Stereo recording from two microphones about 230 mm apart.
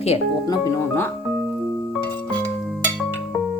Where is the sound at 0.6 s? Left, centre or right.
Centre.